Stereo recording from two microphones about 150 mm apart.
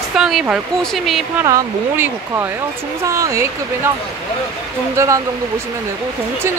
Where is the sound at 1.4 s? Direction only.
15° right (ahead or behind).